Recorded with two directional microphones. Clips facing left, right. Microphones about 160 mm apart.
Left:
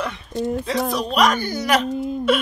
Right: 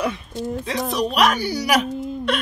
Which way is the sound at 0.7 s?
Centre (ahead or behind).